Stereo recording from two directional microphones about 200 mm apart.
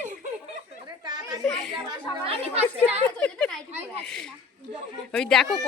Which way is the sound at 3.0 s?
5° left (ahead or behind).